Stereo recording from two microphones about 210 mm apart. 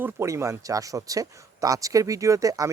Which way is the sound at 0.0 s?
15° right (ahead or behind).